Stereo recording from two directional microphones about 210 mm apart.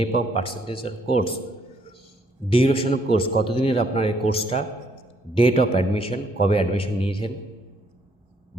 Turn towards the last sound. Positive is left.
turn(degrees=25)  # may be behind; listen again after turning